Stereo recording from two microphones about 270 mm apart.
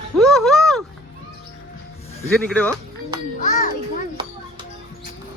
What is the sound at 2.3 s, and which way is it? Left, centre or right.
Speech, centre.